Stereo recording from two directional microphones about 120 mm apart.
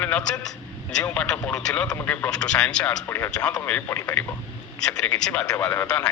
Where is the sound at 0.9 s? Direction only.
10° left (ahead or behind).